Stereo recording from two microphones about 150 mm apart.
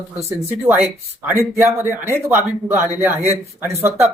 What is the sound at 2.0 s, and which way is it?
Speech, 15° right (ahead or behind).